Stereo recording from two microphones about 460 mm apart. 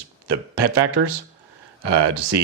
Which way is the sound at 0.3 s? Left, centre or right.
Right.